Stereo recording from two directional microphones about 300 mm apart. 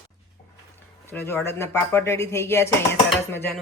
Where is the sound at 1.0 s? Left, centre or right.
Centre.